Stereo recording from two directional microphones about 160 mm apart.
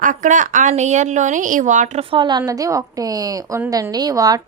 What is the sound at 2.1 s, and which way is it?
A woman's voice, 30° right (ahead or behind).